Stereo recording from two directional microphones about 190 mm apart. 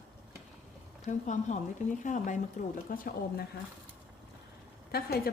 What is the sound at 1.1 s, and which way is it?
Speech, 40° left (ahead or behind).